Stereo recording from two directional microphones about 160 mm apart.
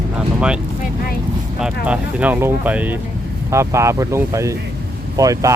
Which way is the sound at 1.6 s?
10° right (ahead or behind).